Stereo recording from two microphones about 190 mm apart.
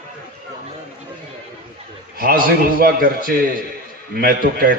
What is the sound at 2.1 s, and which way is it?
A man's voice, 50° right (ahead or behind).